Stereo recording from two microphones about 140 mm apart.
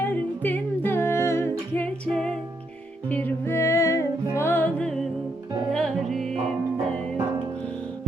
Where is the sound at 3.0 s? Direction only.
10° left (ahead or behind).